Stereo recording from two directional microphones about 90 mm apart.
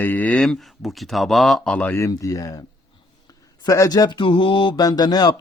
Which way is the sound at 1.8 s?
20° left (ahead or behind).